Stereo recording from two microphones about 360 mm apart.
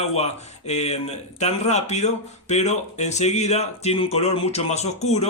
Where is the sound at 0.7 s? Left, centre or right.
Centre.